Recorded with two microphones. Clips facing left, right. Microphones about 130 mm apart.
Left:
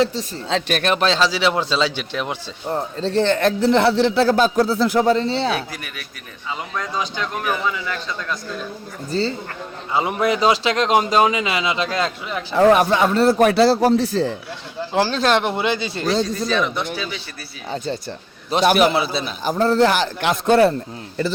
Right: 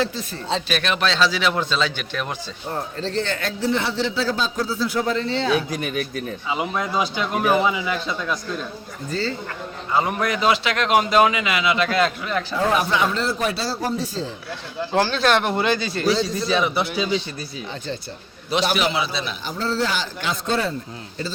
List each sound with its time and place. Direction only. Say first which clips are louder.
0.0 s speech: left 5 dB; 35° left (ahead or behind)
0.7 s a man's voice: left 5 dB; 45° left (ahead or behind); by 2.2 s 30° left (ahead or behind)
3.6 s a man's voice: left 5 dB; 65° left (ahead or behind)
4.9 s speech: left 5 dB; 35° left (ahead or behind)
5.5 s speech: right 6 dB; 20° right (ahead or behind)
6.5 s speech: right 2 dB; 10° right (ahead or behind)
9.0 s a man's voice: left 3 dB; 30° left (ahead or behind)
12.3 s a man's voice: right 2 dB; 20° left (ahead or behind)
12.5 s a man's voice: left 8 dB; 50° left (ahead or behind); by 14.3 s 70° left (ahead or behind)
15.0 s a man's voice: left 3 dB; 30° left (ahead or behind)
16.5 s speech: even; 10° right (ahead or behind)
18.5 s a man's voice: left 6 dB; 50° left (ahead or behind)